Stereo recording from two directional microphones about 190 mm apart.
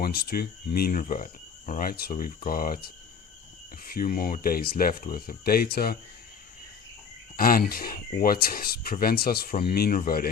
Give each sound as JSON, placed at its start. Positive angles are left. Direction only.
{"t": 0.0, "sound": "speech", "side_deg": 55}
{"t": 7.3, "sound": "speech", "side_deg": 50}